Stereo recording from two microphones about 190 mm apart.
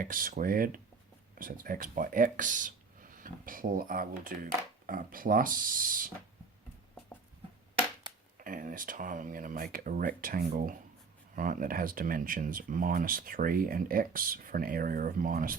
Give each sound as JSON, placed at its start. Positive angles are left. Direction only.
{"t": 0.0, "sound": "speech", "side_deg": -45}
{"t": 8.4, "sound": "speech", "side_deg": -45}